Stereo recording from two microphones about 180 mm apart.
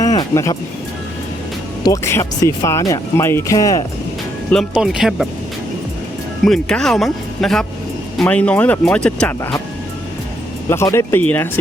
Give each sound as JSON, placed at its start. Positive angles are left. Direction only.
{"t": 0.0, "sound": "music", "side_deg": 20}
{"t": 1.8, "sound": "speech", "side_deg": 15}
{"t": 4.5, "sound": "speech", "side_deg": 0}
{"t": 6.4, "sound": "speech", "side_deg": 5}
{"t": 10.7, "sound": "speech", "side_deg": 15}